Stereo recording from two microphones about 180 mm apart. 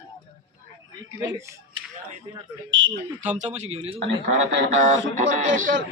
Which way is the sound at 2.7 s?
90° right.